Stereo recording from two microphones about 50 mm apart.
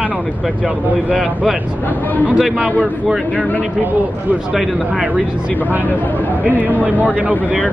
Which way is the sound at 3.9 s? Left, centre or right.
Right.